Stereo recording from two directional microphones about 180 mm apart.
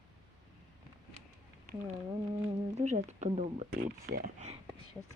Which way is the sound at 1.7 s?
55° right (ahead or behind).